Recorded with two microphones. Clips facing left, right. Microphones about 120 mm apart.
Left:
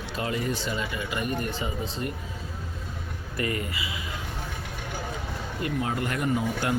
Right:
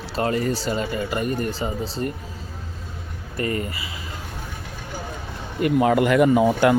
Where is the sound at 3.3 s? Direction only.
35° right (ahead or behind).